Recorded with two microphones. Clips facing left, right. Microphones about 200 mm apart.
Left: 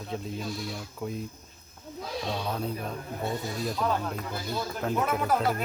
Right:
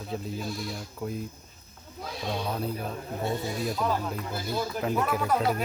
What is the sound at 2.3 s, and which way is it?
Speech, 5° right (ahead or behind).